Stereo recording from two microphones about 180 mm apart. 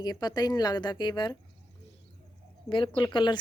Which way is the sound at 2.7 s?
25° left (ahead or behind).